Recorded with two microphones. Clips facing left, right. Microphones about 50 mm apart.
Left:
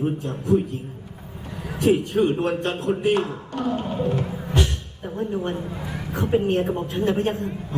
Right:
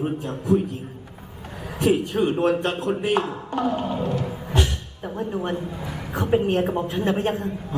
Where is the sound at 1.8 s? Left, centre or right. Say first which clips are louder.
Left 1 dB; right.